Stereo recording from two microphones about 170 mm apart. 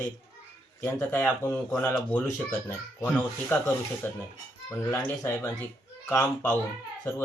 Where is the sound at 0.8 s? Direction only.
10° left (ahead or behind).